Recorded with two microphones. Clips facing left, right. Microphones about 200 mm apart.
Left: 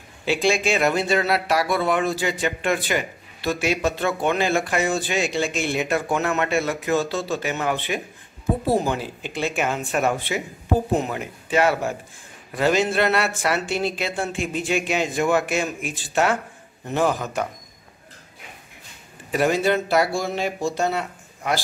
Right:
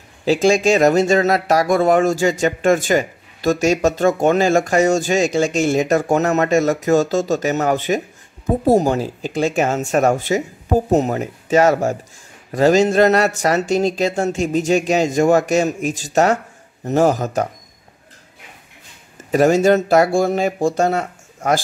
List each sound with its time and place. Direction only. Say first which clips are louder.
0.2 s speech: right 7 dB; 40° right (ahead or behind)
19.1 s speech: right 7 dB; 40° right (ahead or behind)